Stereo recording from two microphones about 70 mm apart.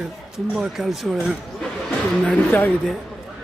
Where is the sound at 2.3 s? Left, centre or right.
Left.